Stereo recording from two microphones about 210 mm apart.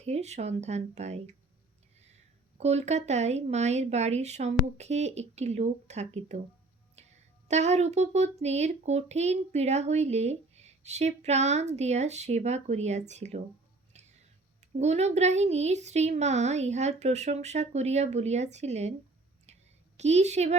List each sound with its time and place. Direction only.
0.0 s a woman's voice: 30° right (ahead or behind)
2.6 s a woman's voice: 30° right (ahead or behind)
13.9 s a sound: 35° right (ahead or behind)
14.8 s a woman's voice: 30° right (ahead or behind)
19.5 s a sound: 30° right (ahead or behind)
20.0 s a woman's voice: 30° right (ahead or behind)